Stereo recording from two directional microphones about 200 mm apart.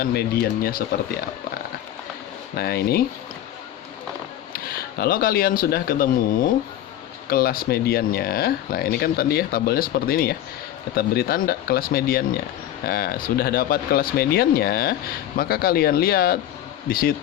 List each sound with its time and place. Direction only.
0.0 s speech: 50° left (ahead or behind)
2.6 s speech: 50° left (ahead or behind)
4.5 s speech: 50° left (ahead or behind)